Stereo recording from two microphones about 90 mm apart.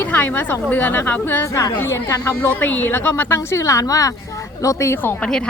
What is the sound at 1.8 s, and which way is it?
Speech, 35° left (ahead or behind).